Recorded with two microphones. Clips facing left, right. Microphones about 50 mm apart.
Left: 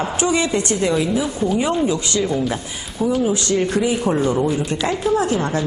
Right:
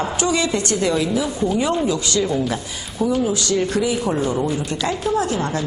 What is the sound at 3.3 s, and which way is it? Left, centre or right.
Speech, left.